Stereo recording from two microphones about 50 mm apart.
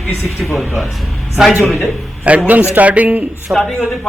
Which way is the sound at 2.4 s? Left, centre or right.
Right.